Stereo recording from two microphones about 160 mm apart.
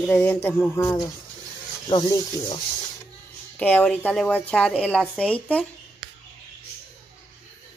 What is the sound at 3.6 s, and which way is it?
Speech, 10° left (ahead or behind).